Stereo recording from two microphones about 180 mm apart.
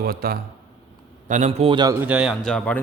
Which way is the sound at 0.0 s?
55° right (ahead or behind).